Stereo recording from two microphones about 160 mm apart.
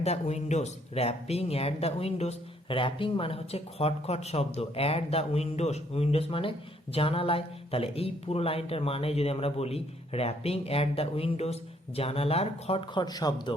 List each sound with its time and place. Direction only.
0.0 s speech: 40° left (ahead or behind); by 13.5 s 25° left (ahead or behind)